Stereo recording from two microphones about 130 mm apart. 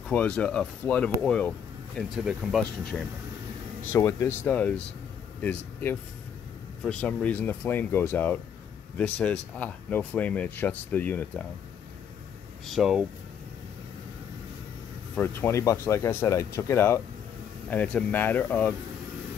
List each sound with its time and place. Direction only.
0.1 s speech: 10° left (ahead or behind)
2.0 s speech: centre (ahead or behind)
3.9 s speech: 20° left (ahead or behind)
12.6 s speech: centre (ahead or behind)
15.1 s speech: 15° left (ahead or behind)
17.6 s speech: 10° left (ahead or behind)